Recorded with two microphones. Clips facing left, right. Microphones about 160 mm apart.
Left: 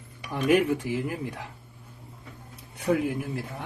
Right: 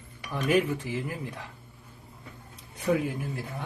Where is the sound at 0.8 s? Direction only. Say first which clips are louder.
Left 4 dB; 15° left (ahead or behind).